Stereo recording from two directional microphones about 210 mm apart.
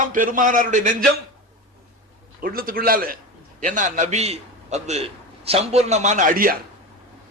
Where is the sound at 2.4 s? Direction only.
45° right (ahead or behind).